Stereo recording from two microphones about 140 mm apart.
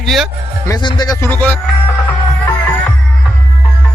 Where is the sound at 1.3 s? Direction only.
15° left (ahead or behind).